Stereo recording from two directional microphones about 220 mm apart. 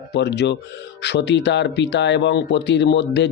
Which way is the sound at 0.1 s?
50° left (ahead or behind).